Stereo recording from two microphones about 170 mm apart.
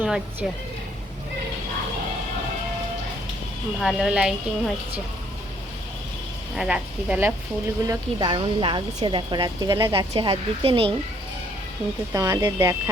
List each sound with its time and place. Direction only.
0.0 s speech: 10° right (ahead or behind)
3.8 s speech: centre (ahead or behind)
6.6 s speech: 5° right (ahead or behind)
7.9 s a woman's voice: 30° right (ahead or behind)
12.1 s a woman's voice: 20° right (ahead or behind)